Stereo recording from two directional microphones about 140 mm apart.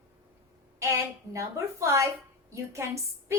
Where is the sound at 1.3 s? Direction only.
20° right (ahead or behind).